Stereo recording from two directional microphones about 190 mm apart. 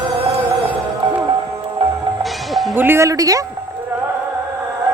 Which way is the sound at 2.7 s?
10° right (ahead or behind).